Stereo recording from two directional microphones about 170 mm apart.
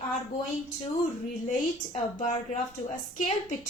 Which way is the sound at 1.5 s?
45° left (ahead or behind).